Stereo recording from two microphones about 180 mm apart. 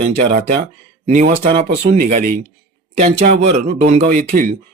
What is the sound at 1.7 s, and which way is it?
Speech, 55° right (ahead or behind).